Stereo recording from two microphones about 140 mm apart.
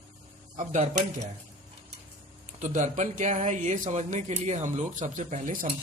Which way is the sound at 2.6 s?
60° right (ahead or behind).